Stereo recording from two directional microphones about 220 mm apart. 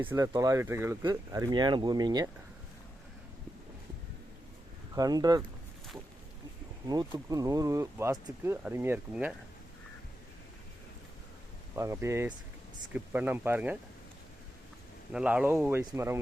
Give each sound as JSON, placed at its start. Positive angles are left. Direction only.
{"t": 0.0, "sound": "speech", "side_deg": -10}
{"t": 4.9, "sound": "speech", "side_deg": -15}
{"t": 6.8, "sound": "speech", "side_deg": -20}
{"t": 11.7, "sound": "speech", "side_deg": -10}
{"t": 15.1, "sound": "speech", "side_deg": -5}